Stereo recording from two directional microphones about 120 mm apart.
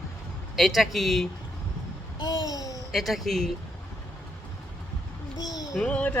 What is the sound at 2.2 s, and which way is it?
Speech, 30° left (ahead or behind).